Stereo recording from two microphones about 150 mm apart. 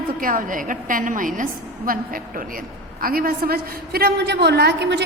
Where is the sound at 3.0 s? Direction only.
75° right (ahead or behind).